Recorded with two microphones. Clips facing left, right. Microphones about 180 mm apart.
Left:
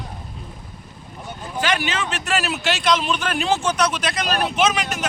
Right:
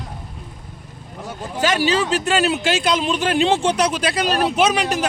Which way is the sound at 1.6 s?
35° right (ahead or behind).